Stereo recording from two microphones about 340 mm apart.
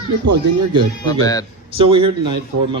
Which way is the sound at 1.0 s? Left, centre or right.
Centre.